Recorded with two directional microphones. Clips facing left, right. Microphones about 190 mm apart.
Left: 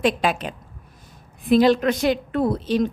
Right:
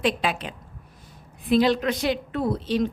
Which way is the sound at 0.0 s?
45° left (ahead or behind).